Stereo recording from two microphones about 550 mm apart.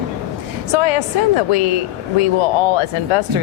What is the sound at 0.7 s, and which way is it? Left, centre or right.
Speech, left.